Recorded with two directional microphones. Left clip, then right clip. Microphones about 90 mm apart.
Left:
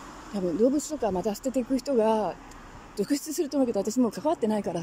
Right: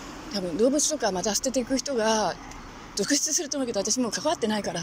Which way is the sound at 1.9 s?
55° left (ahead or behind).